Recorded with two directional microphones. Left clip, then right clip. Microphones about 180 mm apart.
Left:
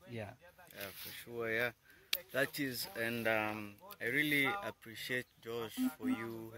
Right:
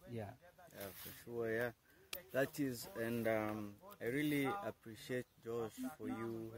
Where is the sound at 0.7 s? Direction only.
5° right (ahead or behind).